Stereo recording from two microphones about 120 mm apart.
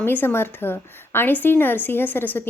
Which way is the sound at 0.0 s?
20° left (ahead or behind).